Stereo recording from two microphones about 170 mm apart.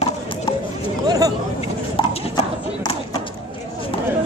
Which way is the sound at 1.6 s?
35° left (ahead or behind).